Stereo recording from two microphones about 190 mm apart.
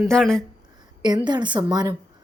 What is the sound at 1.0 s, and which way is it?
Speech, 20° right (ahead or behind).